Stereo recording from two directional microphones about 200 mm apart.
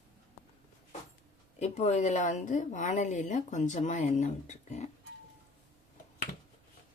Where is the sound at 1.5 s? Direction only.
35° left (ahead or behind).